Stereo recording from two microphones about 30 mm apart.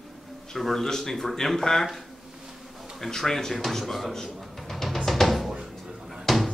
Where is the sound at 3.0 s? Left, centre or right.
Centre.